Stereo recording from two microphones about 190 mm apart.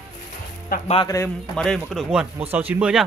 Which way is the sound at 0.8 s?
30° left (ahead or behind).